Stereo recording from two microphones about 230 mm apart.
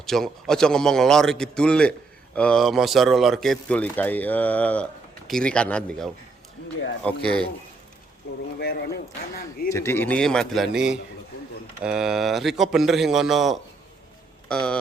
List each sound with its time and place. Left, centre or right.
0.0 s a man's voice: centre
8.5 s speech: left
9.6 s a man's voice: centre